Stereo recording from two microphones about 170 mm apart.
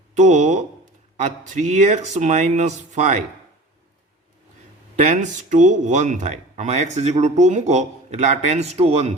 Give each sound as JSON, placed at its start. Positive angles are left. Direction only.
{"t": 0.1, "sound": "speech", "side_deg": -45}
{"t": 4.9, "sound": "speech", "side_deg": -45}